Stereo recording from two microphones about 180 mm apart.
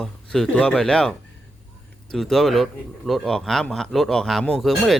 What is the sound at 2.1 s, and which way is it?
Speech, centre (ahead or behind).